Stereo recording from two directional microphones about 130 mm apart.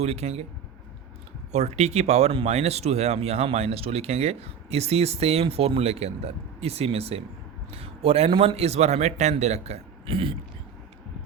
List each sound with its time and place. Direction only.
0.0 s speech: 55° right (ahead or behind)
1.5 s speech: 55° right (ahead or behind)